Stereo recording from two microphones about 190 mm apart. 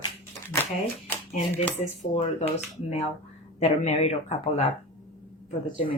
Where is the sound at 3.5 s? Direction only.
35° left (ahead or behind).